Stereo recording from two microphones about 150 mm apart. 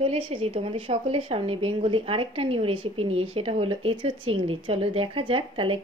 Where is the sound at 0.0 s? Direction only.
40° right (ahead or behind).